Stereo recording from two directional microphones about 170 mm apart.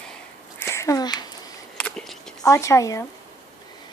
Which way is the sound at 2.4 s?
20° left (ahead or behind).